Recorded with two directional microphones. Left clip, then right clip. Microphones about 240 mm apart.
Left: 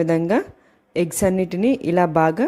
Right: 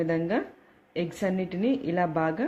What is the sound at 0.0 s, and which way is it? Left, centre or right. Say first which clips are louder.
A woman's voice: left 8 dB; left.